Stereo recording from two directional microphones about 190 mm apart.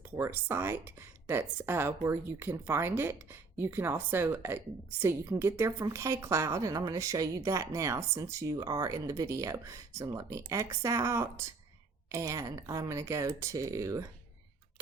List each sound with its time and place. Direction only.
0.2 s a woman's voice: 10° right (ahead or behind)